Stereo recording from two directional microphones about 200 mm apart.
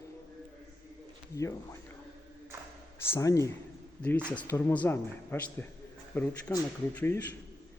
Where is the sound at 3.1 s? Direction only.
15° left (ahead or behind).